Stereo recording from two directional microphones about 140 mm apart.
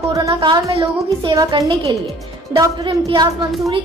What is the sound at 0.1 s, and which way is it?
Music, 25° right (ahead or behind).